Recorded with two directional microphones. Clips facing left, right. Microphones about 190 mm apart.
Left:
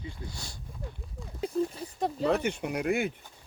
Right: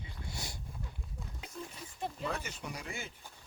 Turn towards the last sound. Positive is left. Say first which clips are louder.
# left 14 dB
turn(degrees=60)  # may be behind; listen again after turning